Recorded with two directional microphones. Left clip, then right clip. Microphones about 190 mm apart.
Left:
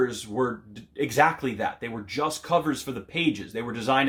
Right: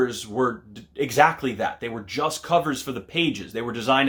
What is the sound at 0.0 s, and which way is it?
Speech, 20° right (ahead or behind).